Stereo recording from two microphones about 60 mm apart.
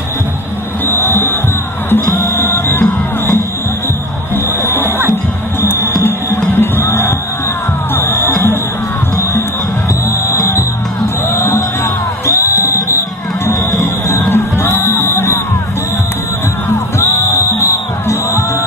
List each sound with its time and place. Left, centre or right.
0.8 s music: left
4.6 s music: left
10.2 s music: left
11.8 s music: left
14.3 s music: left
16.6 s music: left